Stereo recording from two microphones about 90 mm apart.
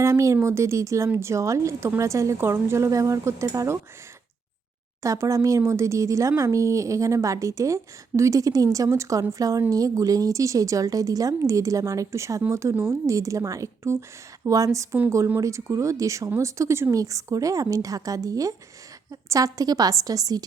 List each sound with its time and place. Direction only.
0.0 s speech: 35° right (ahead or behind)
5.0 s speech: 35° right (ahead or behind)